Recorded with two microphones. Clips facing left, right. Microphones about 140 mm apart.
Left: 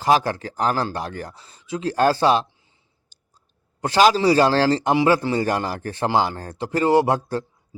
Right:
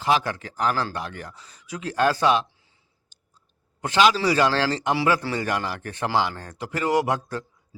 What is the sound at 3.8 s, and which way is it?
Speech, 35° left (ahead or behind).